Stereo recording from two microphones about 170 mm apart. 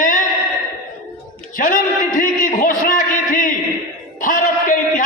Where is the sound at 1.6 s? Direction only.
50° left (ahead or behind).